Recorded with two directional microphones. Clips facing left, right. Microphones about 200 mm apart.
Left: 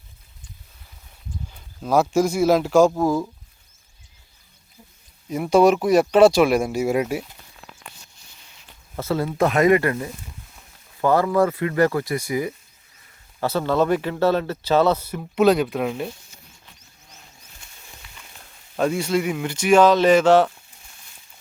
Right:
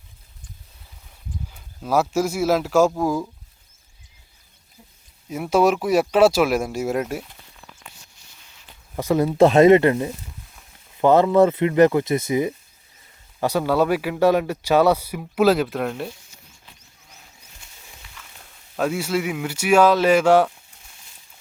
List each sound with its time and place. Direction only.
1.8 s speech: 5° right (ahead or behind)
5.3 s speech: 5° right (ahead or behind)
9.0 s speech: 15° right (ahead or behind); by 16.0 s centre (ahead or behind)
18.8 s speech: 5° right (ahead or behind)